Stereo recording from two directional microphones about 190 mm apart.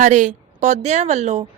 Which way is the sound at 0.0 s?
40° right (ahead or behind).